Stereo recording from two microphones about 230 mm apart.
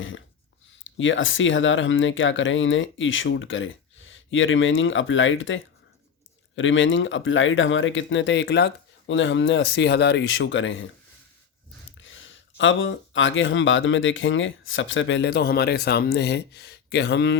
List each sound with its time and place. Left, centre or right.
0.9 s speech: left
11.9 s speech: left